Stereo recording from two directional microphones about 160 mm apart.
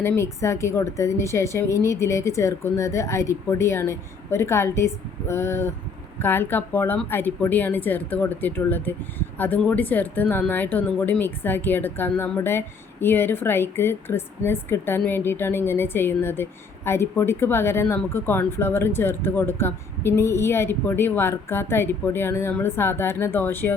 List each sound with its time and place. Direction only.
0.0 s speech: 15° left (ahead or behind)